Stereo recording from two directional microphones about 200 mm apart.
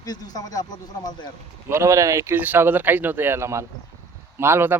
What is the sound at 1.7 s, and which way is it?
Speech, 15° right (ahead or behind).